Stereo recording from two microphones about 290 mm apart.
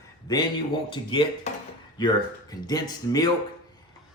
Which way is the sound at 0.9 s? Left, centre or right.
Centre.